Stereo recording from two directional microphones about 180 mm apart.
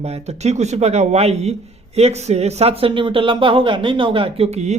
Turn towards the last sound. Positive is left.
turn(degrees=-35)  # may be behind; listen again after turning